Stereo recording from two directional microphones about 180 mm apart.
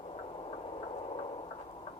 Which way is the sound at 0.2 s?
30° left (ahead or behind).